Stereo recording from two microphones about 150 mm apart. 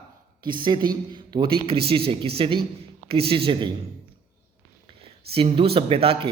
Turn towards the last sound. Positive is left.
turn(degrees=-40)  # may be behind; listen again after turning